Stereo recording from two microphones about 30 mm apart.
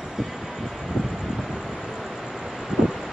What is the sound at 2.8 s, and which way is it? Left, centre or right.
Vehicle, right.